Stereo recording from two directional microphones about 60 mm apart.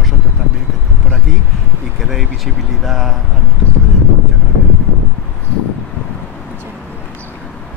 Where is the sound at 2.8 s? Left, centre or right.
Centre.